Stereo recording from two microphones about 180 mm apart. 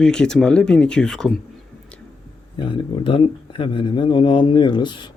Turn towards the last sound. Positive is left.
turn(degrees=25)  # may be behind; listen again after turning